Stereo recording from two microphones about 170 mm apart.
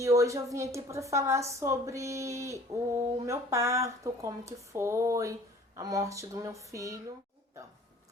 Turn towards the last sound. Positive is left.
turn(degrees=-20)  # may be behind; listen again after turning